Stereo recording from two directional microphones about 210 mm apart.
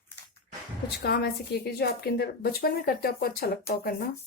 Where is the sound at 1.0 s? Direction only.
50° left (ahead or behind).